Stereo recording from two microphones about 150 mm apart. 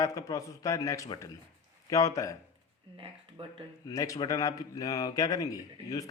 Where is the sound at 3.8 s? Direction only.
20° left (ahead or behind).